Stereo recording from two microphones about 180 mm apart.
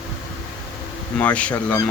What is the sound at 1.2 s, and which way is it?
Speech, 5° left (ahead or behind).